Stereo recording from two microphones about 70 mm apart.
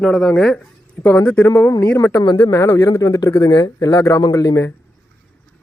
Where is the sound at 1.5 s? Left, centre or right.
Left.